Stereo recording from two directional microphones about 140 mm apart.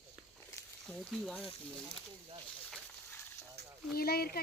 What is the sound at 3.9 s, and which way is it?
Speech, 90° left.